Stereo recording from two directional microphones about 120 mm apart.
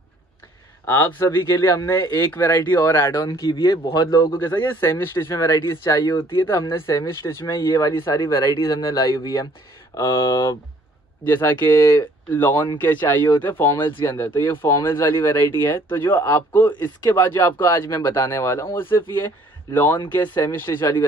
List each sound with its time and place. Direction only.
0.8 s speech: 20° left (ahead or behind)
2.2 s speech: 20° left (ahead or behind)
3.3 s speech: 40° left (ahead or behind)
4.6 s speech: 20° left (ahead or behind)
5.9 s speech: 45° left (ahead or behind)
6.4 s speech: 20° left (ahead or behind)